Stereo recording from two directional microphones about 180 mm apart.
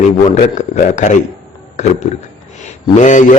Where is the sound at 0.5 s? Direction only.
40° left (ahead or behind).